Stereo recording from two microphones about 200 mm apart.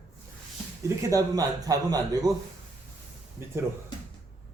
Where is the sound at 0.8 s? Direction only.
15° right (ahead or behind).